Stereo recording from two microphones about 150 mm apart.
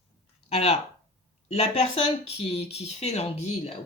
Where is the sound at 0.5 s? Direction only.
45° left (ahead or behind).